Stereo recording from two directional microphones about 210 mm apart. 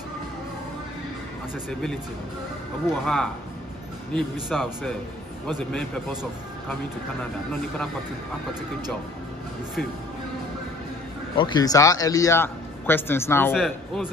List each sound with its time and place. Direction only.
1.7 s speech: 5° left (ahead or behind)
11.3 s a man's voice: 20° left (ahead or behind); by 14.0 s centre (ahead or behind)